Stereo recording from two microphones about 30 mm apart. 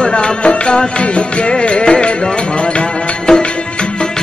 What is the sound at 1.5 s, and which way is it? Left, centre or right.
Music, left.